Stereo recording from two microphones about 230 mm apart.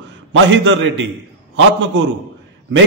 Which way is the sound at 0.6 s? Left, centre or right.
Right.